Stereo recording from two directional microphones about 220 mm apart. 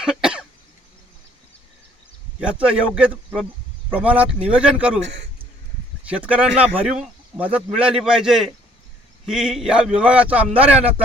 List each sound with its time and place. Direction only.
0.0 s cough: 5° right (ahead or behind)
2.4 s a man's voice: 5° right (ahead or behind)
5.0 s a sound: 50° right (ahead or behind)
6.1 s a man's voice: 5° right (ahead or behind)